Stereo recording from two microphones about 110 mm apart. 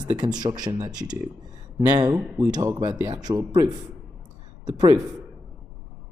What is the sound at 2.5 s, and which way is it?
Speech, 35° right (ahead or behind).